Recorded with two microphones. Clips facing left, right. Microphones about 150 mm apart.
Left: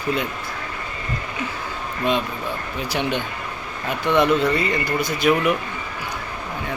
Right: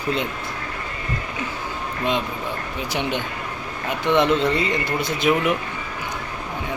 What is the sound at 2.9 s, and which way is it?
Speech, 15° right (ahead or behind).